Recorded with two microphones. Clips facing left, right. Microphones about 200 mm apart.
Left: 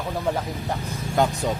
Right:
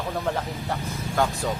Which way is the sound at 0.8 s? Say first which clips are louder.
Left 3 dB; 20° left (ahead or behind).